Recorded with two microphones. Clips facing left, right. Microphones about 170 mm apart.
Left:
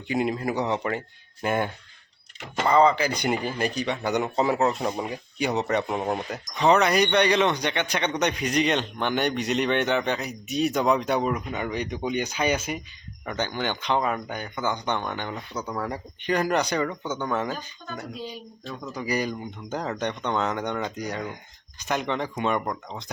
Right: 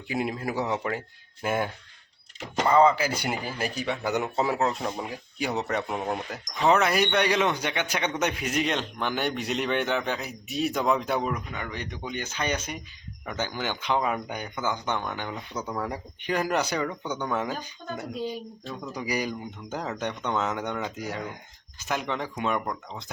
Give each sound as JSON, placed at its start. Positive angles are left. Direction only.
{"t": 0.1, "sound": "speech", "side_deg": -5}
{"t": 11.5, "sound": "speech", "side_deg": 20}
{"t": 13.2, "sound": "speech", "side_deg": -5}